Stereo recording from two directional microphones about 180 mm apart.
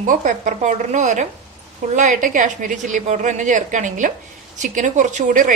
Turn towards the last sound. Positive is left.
turn(degrees=-45)  # may be behind; listen again after turning